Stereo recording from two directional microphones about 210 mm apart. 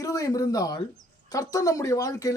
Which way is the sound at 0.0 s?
15° left (ahead or behind).